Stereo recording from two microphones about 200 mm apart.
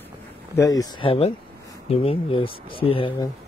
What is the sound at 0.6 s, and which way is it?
Speech, 15° left (ahead or behind).